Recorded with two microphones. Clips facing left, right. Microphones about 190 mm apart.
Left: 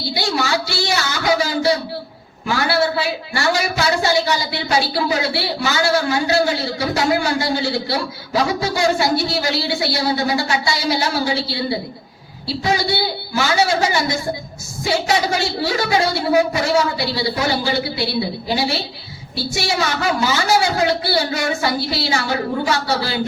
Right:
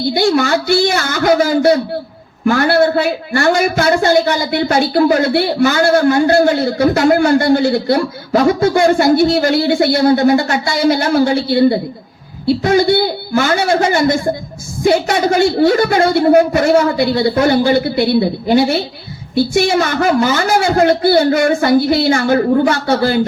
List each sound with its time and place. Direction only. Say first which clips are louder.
0.0 s a man's voice: right 9 dB; 50° right (ahead or behind)